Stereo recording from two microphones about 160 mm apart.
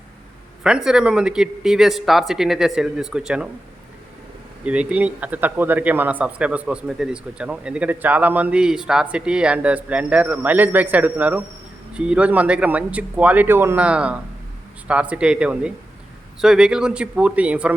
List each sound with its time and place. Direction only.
0.6 s speech: 5° right (ahead or behind)
4.6 s speech: 10° right (ahead or behind)